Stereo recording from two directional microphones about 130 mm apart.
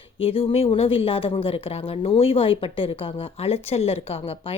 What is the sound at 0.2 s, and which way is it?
A woman's voice, 45° left (ahead or behind).